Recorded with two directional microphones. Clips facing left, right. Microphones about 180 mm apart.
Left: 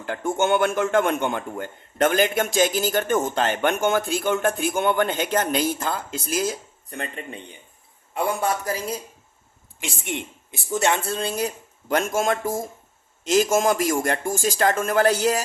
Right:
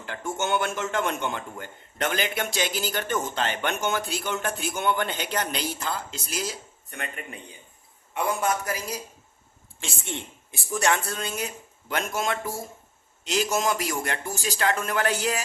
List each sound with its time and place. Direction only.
0.0 s a man's voice: 50° left (ahead or behind)
6.9 s a man's voice: 30° left (ahead or behind)
9.8 s a man's voice: 15° left (ahead or behind); by 15.4 s 40° left (ahead or behind)